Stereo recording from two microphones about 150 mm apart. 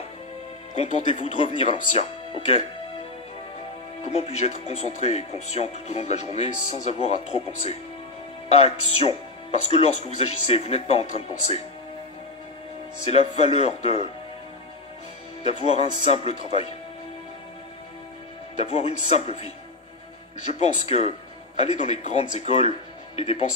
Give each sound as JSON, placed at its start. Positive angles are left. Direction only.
{"t": 0.7, "sound": "speech", "side_deg": 45}
{"t": 4.0, "sound": "speech", "side_deg": 45}
{"t": 13.0, "sound": "speech", "side_deg": 45}
{"t": 15.4, "sound": "speech", "side_deg": 45}
{"t": 18.6, "sound": "speech", "side_deg": 45}